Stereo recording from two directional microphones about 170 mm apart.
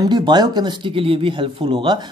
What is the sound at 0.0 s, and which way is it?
Speech, 25° right (ahead or behind).